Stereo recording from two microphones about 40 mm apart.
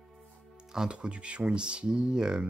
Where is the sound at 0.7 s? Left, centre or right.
Right.